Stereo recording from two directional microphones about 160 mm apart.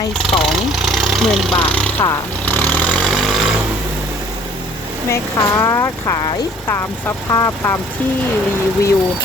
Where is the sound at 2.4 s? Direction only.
10° left (ahead or behind).